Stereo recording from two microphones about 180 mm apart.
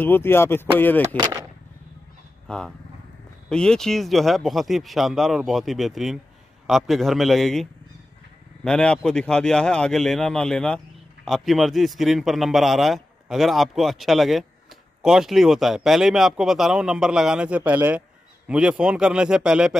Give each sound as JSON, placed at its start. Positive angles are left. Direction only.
{"t": 0.0, "sound": "speech", "side_deg": 10}
{"t": 1.1, "sound": "speech", "side_deg": -20}
{"t": 2.4, "sound": "a man's voice", "side_deg": 5}
{"t": 8.6, "sound": "a man's voice", "side_deg": 5}